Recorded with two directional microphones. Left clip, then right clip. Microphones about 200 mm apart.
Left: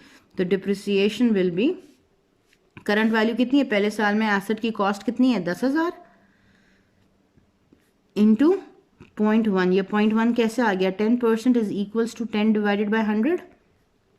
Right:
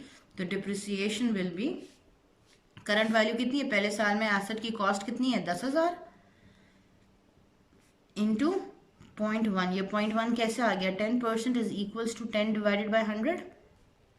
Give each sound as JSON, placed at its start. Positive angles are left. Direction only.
{"t": 0.0, "sound": "speech", "side_deg": 40}
{"t": 2.7, "sound": "speech", "side_deg": 40}
{"t": 8.1, "sound": "speech", "side_deg": 40}